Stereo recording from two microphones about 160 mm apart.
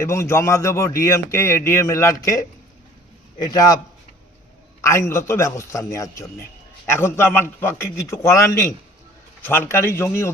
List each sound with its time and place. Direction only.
0.0 s a man's voice: 15° left (ahead or behind)
4.8 s speech: 15° left (ahead or behind)